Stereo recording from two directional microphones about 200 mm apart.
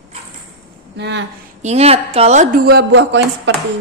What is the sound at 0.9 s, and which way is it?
Speech, 60° right (ahead or behind).